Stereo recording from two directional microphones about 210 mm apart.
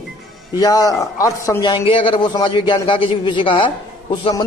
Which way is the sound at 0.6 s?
15° left (ahead or behind).